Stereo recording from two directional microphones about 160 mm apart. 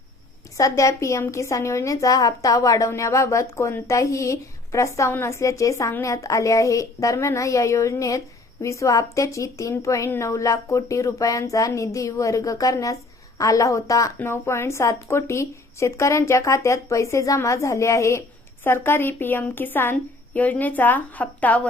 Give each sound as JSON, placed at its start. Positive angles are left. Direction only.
{"t": 0.5, "sound": "a woman's voice", "side_deg": 20}